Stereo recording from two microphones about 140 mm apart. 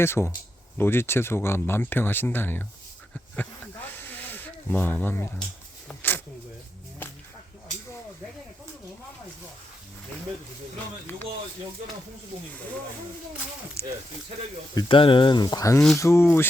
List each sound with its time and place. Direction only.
0.0 s speech: 15° left (ahead or behind)
4.3 s speech: 15° left (ahead or behind)
5.9 s a sound: 15° left (ahead or behind)
13.8 s speech: 15° left (ahead or behind)
14.8 s speech: 40° left (ahead or behind); by 16.5 s 15° left (ahead or behind)